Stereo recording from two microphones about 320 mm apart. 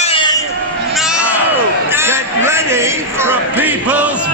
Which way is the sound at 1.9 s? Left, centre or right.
Centre.